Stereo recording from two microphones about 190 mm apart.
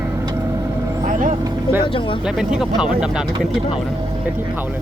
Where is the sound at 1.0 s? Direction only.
40° right (ahead or behind).